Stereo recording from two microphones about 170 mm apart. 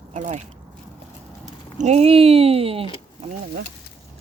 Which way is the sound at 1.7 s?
40° right (ahead or behind).